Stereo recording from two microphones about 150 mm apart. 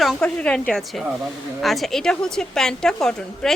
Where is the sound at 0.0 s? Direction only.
5° left (ahead or behind).